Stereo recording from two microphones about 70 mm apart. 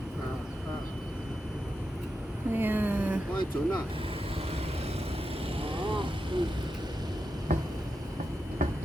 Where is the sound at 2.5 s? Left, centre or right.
Right.